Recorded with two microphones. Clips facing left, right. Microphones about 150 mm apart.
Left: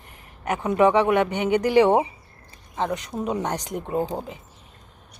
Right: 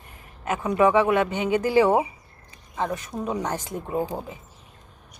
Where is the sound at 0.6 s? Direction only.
20° left (ahead or behind).